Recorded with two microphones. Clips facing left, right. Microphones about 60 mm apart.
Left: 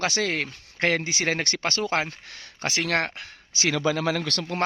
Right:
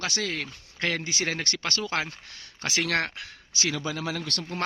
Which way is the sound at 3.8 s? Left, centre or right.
Left.